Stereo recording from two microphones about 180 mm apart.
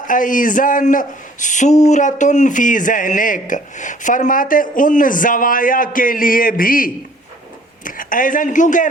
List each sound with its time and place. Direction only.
0.1 s speech: 50° left (ahead or behind)